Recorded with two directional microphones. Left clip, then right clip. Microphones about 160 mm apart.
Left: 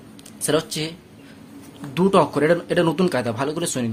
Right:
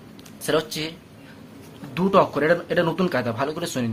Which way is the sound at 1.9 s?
30° left (ahead or behind).